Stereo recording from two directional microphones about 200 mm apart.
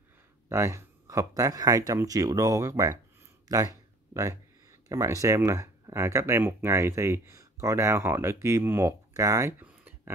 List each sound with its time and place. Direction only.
0.5 s speech: 15° right (ahead or behind)